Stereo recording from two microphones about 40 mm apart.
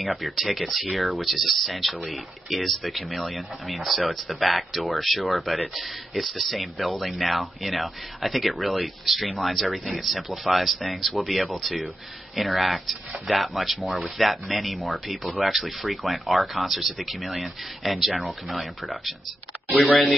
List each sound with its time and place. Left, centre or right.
0.0 s speech: centre